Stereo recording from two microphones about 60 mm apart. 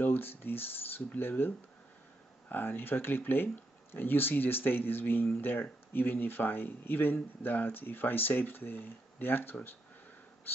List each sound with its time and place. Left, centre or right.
0.0 s speech: left
2.5 s speech: left